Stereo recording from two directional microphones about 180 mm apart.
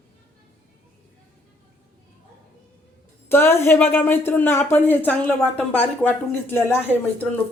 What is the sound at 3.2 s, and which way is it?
Speech, 15° left (ahead or behind).